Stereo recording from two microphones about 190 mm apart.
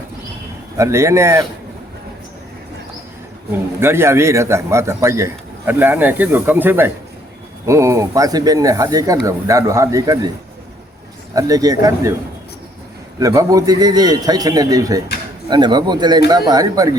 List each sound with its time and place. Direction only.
0.8 s speech: 15° right (ahead or behind)
3.5 s speech: 10° right (ahead or behind)
11.3 s speech: 20° right (ahead or behind)
13.1 s a man's voice: 20° right (ahead or behind)